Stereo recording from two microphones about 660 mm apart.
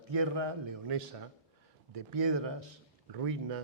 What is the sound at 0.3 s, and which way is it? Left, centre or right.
A man's voice, right.